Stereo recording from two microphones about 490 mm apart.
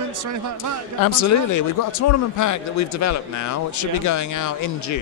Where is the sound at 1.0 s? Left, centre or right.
Left.